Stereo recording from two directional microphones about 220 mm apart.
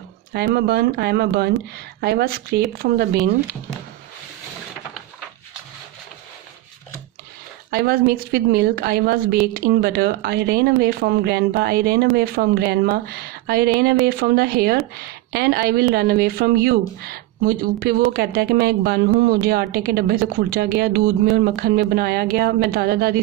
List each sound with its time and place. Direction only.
0.3 s speech: 45° right (ahead or behind)
7.7 s speech: 45° right (ahead or behind)